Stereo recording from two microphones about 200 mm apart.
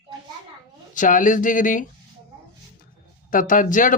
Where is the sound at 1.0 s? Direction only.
40° left (ahead or behind).